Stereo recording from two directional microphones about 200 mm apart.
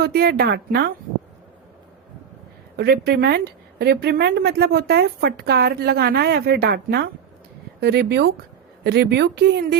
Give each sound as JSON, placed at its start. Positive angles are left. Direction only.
{"t": 0.0, "sound": "a woman's voice", "side_deg": -50}
{"t": 2.7, "sound": "a woman's voice", "side_deg": -55}